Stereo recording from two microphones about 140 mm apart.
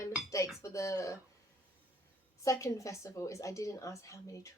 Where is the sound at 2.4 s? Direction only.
20° left (ahead or behind).